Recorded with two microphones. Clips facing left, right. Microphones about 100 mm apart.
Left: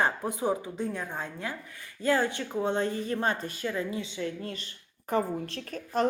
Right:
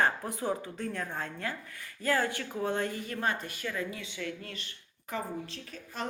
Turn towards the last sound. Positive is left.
turn(degrees=50)  # may be behind; listen again after turning